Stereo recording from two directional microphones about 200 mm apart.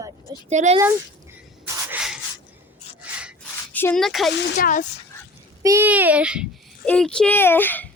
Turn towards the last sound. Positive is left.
turn(degrees=10)  # may be behind; listen again after turning